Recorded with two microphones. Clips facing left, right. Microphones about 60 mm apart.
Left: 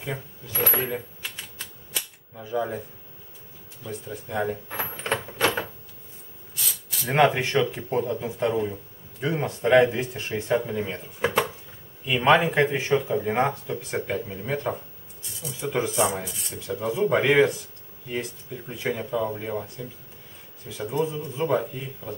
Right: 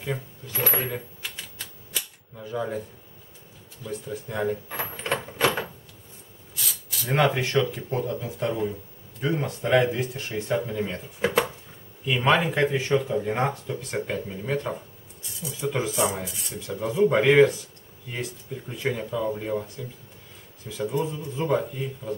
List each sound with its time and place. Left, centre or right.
0.0 s speech: centre
2.3 s speech: centre
3.8 s speech: centre
7.1 s speech: centre